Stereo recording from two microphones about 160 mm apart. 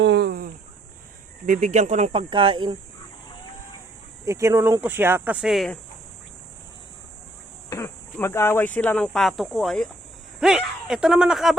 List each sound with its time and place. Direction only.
0.1 s a sound: 85° right
1.5 s speech: 50° right (ahead or behind); by 2.7 s 35° right (ahead or behind)
4.3 s speech: 20° right (ahead or behind); by 5.8 s centre (ahead or behind)
7.7 s cricket: 20° left (ahead or behind)
8.1 s speech: 15° left (ahead or behind); by 11.5 s centre (ahead or behind)